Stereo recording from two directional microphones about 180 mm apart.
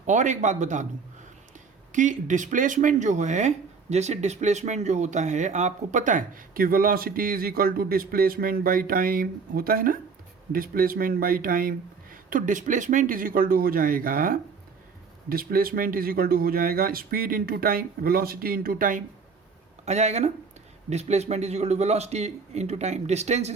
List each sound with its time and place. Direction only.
0.0 s speech: 40° right (ahead or behind)
1.9 s speech: 45° right (ahead or behind)
19.8 s a man's voice: 40° right (ahead or behind)